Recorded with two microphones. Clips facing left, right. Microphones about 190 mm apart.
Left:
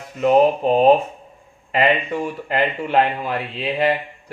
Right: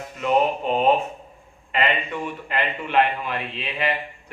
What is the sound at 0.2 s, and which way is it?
Speech, 35° left (ahead or behind).